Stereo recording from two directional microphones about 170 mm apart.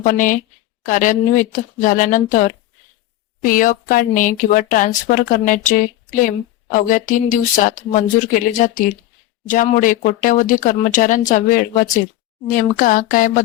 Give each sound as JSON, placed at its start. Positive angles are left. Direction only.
{"t": 0.0, "sound": "speech", "side_deg": 50}